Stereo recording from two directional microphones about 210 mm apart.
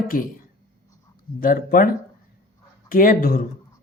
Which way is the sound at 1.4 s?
40° left (ahead or behind).